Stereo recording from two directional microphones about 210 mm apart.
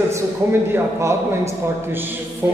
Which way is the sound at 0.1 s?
10° right (ahead or behind).